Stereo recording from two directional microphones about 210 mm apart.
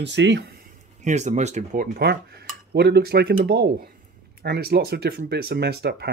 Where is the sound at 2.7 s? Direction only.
50° right (ahead or behind).